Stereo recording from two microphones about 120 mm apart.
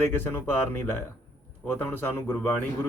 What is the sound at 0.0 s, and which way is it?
Speech, 15° left (ahead or behind).